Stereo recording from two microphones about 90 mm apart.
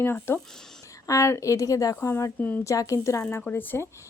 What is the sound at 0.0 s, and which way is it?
Speech, 25° left (ahead or behind).